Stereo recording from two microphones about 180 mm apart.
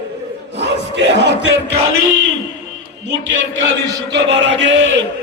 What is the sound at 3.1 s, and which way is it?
A man's voice, 90° right.